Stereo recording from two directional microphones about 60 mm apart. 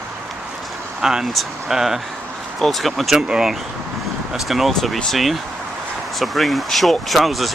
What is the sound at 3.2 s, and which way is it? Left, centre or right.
Speech, centre.